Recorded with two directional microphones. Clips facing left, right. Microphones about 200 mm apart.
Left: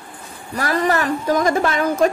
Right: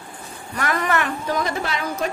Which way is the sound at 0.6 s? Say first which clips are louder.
Left 4 dB; 35° left (ahead or behind).